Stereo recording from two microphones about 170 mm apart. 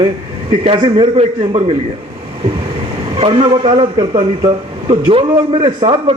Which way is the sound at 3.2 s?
35° right (ahead or behind).